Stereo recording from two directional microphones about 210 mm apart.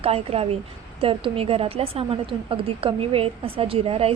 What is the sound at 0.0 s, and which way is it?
A woman's voice, 30° right (ahead or behind).